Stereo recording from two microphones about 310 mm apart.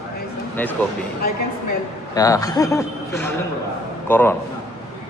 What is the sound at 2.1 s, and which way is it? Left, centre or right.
A man's voice, centre.